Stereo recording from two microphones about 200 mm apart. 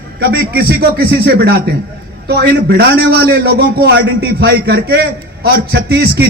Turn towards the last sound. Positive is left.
turn(degrees=-55)  # may be behind; listen again after turning